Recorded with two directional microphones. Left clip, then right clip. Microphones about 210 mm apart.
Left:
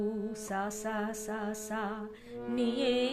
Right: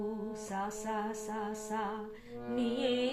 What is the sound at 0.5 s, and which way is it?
Music, 55° left (ahead or behind).